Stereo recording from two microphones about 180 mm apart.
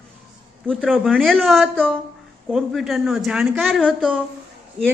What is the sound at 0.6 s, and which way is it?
A woman's voice, 5° left (ahead or behind).